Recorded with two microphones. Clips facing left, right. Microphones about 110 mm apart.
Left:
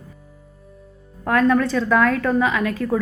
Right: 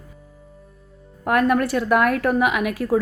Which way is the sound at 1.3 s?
15° right (ahead or behind).